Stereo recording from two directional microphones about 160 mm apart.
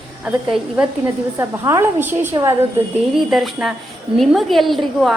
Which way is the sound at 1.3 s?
15° right (ahead or behind).